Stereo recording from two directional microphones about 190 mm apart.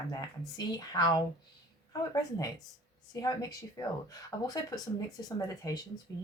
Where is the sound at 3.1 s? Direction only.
20° left (ahead or behind).